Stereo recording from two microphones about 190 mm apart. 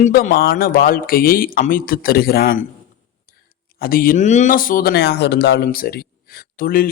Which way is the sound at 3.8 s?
50° left (ahead or behind).